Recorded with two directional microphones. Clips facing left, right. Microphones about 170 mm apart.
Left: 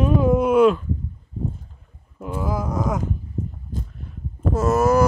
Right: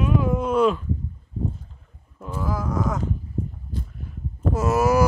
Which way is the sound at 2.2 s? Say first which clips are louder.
Left 2 dB; 15° left (ahead or behind).